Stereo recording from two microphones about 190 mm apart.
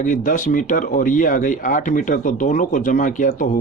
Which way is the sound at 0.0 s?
45° left (ahead or behind).